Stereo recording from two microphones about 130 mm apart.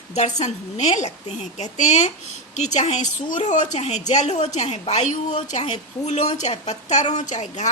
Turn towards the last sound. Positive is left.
turn(degrees=65)  # may be behind; listen again after turning